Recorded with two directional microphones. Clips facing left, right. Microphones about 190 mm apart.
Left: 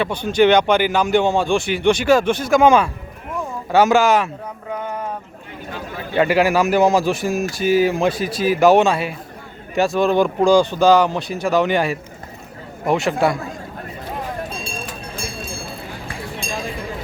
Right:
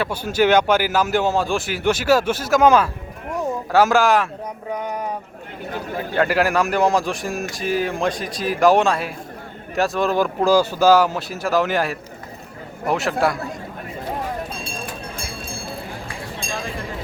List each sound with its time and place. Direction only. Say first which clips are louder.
0.0 s a man's voice: left 3 dB; 5° right (ahead or behind)
4.7 s a sound: even; 15° right (ahead or behind)
6.1 s a man's voice: left 3 dB; centre (ahead or behind)